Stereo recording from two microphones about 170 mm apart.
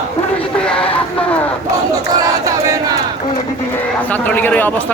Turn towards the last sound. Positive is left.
turn(degrees=10)  # may be behind; listen again after turning